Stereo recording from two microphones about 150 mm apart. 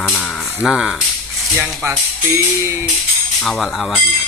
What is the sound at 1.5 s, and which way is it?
Speech, 15° right (ahead or behind).